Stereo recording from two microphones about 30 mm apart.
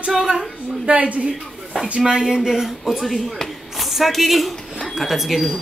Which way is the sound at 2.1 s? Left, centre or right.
Right.